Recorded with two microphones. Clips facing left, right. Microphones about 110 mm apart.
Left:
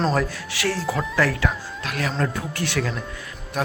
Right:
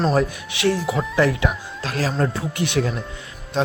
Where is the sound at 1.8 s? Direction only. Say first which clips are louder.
Right 3 dB; 30° right (ahead or behind).